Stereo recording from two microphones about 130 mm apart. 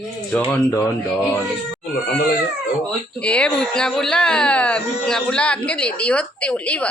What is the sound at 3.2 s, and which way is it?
Speech, 10° left (ahead or behind).